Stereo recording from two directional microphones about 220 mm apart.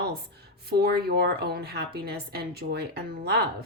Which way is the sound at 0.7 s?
45° right (ahead or behind).